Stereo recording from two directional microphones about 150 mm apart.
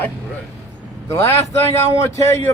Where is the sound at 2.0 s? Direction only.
20° left (ahead or behind).